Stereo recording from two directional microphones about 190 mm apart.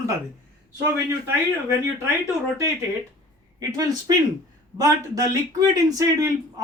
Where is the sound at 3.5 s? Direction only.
20° right (ahead or behind).